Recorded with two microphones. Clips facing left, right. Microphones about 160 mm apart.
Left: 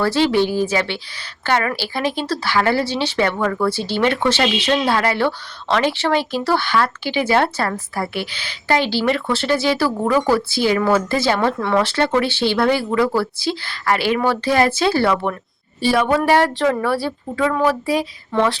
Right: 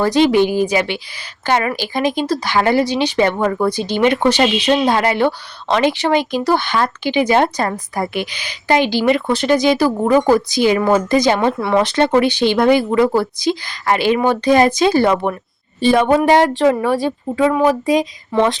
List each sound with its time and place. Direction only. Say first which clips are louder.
0.0 s speech: right 4 dB; 15° right (ahead or behind)